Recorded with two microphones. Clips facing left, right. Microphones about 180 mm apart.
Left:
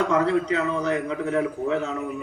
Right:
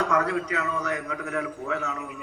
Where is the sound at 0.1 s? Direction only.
25° left (ahead or behind).